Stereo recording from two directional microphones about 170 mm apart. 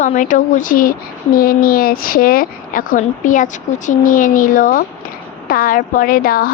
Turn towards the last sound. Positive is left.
turn(degrees=60)  # may be behind; listen again after turning